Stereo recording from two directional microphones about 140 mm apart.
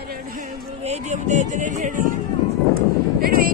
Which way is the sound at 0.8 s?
55° right (ahead or behind).